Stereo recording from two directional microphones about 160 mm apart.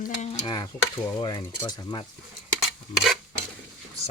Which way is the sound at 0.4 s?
30° left (ahead or behind).